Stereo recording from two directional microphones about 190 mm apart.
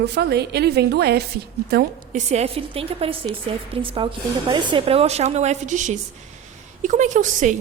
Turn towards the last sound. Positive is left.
turn(degrees=-40)  # may be behind; listen again after turning